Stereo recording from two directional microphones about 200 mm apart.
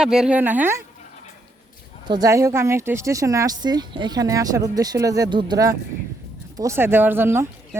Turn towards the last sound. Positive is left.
turn(degrees=-10)  # may be behind; listen again after turning